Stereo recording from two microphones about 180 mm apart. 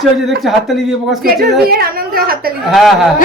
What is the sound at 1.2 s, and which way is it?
A woman's voice, 55° right (ahead or behind).